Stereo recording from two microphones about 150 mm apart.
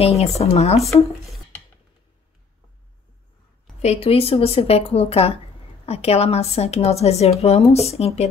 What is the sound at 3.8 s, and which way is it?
A woman's voice, 40° left (ahead or behind).